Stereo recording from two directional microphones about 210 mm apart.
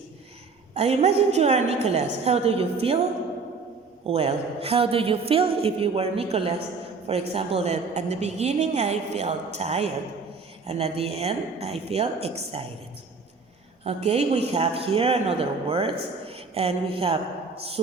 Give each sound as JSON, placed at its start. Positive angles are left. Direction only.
{"t": 0.7, "sound": "a woman's voice", "side_deg": -30}
{"t": 4.0, "sound": "a man's voice", "side_deg": -30}
{"t": 13.8, "sound": "a man's voice", "side_deg": -30}